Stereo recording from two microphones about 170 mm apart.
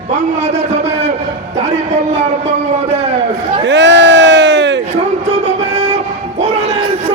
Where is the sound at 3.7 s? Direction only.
90° right.